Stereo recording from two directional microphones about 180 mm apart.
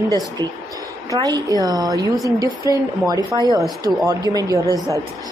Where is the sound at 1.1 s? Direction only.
20° right (ahead or behind).